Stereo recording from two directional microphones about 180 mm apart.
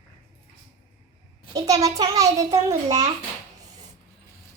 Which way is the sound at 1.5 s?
20° right (ahead or behind).